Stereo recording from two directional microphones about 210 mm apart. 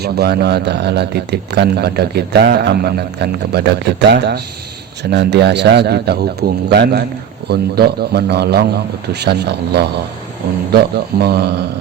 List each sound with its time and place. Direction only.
0.0 s a man's voice: 50° right (ahead or behind)